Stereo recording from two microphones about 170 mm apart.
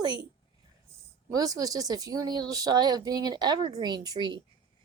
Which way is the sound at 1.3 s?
20° right (ahead or behind).